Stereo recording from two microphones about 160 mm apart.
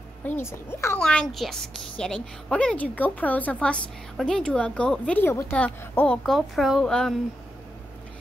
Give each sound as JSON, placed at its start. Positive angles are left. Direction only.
{"t": 0.2, "sound": "a child's voice", "side_deg": 15}
{"t": 0.9, "sound": "a woman's voice", "side_deg": 5}